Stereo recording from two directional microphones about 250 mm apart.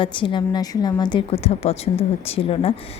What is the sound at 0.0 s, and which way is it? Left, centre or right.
A woman's voice, centre.